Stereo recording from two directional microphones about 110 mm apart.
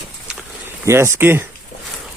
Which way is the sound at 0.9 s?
25° right (ahead or behind).